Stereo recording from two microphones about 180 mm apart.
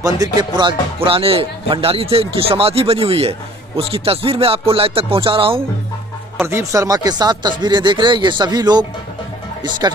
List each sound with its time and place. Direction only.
0.0 s speech: 20° right (ahead or behind)
6.4 s speech: 15° right (ahead or behind)